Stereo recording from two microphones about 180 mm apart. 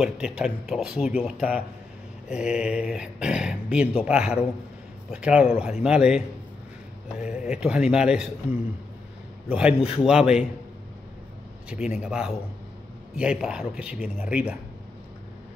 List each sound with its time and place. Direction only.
0.0 s speech: 5° right (ahead or behind)
9.5 s a man's voice: 5° right (ahead or behind)
11.7 s speech: 5° right (ahead or behind)